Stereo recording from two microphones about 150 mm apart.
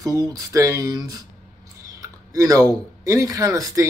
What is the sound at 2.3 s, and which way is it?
Speech, 20° right (ahead or behind).